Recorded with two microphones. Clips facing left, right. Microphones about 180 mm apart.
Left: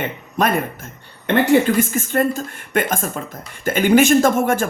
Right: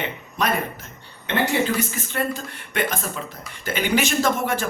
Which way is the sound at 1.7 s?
45° left (ahead or behind).